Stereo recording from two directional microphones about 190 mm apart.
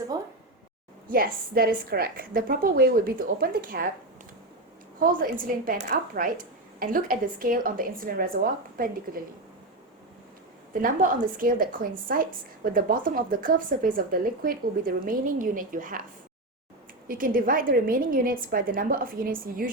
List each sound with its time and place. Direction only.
1.0 s a woman's voice: 50° right (ahead or behind)
4.9 s a woman's voice: 50° right (ahead or behind)
10.8 s a woman's voice: 45° right (ahead or behind)
17.1 s a woman's voice: 45° right (ahead or behind)